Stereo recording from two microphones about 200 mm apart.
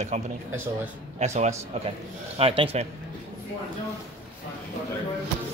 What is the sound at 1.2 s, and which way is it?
Speech, 35° right (ahead or behind).